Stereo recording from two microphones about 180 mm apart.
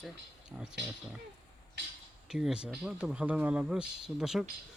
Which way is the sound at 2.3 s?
5° right (ahead or behind).